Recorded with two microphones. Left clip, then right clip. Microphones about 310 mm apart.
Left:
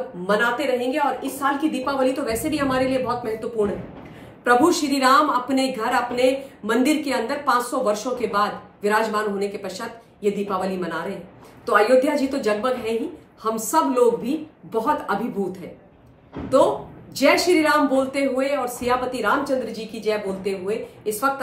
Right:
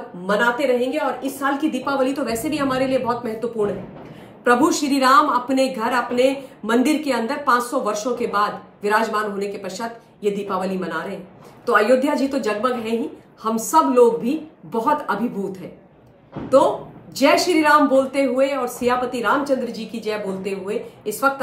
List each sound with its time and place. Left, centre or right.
0.3 s a woman's voice: centre
4.5 s a woman's voice: centre